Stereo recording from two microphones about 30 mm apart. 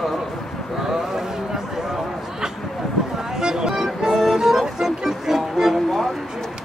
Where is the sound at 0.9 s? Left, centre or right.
Centre.